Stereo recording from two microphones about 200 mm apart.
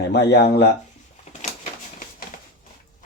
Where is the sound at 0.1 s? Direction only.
55° left (ahead or behind).